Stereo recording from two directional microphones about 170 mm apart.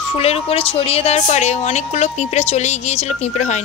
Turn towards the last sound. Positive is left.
turn(degrees=40)  # may be behind; listen again after turning